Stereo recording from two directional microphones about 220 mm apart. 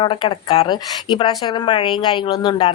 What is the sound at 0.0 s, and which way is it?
Speech, 25° left (ahead or behind).